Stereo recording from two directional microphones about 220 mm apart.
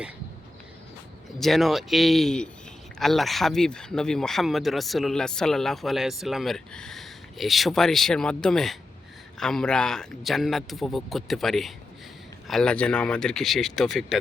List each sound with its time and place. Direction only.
1.4 s speech: centre (ahead or behind)